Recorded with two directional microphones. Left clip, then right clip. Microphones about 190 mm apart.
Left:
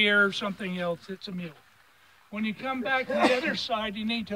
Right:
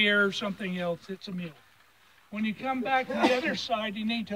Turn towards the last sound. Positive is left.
turn(degrees=0)  # may be behind; listen again after turning